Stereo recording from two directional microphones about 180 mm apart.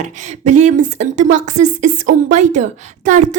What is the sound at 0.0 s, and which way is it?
Speech, 40° right (ahead or behind).